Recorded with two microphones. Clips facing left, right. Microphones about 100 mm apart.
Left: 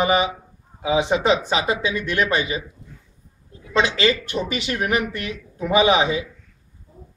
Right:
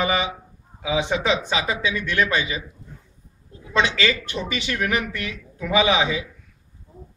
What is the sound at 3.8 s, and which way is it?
Speech, 35° left (ahead or behind).